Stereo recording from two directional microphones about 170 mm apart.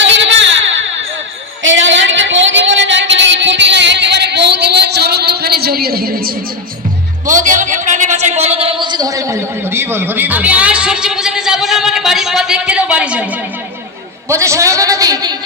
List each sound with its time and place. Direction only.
0.0 s a sound: 90° right; by 6.3 s 60° right (ahead or behind)
7.3 s a man's voice: 50° right (ahead or behind); by 13.2 s 5° right (ahead or behind)
14.3 s a man's voice: 15° right (ahead or behind)